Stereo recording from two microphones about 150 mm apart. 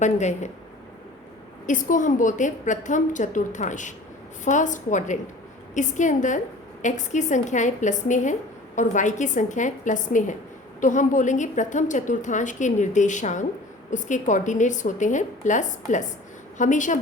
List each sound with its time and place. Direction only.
0.0 s speech: 50° left (ahead or behind)
1.6 s a woman's voice: 60° left (ahead or behind)